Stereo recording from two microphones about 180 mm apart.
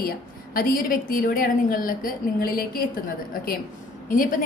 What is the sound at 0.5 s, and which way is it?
A woman's voice, 50° left (ahead or behind).